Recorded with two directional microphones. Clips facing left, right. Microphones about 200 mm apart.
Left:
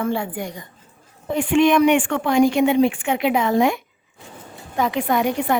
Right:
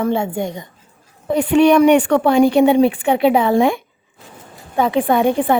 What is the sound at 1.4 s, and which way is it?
A woman's voice, 40° right (ahead or behind).